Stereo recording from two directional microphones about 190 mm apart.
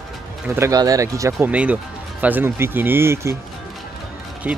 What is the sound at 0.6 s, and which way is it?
Speech, 20° right (ahead or behind).